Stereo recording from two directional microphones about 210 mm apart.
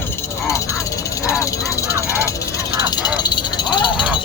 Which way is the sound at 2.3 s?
15° left (ahead or behind).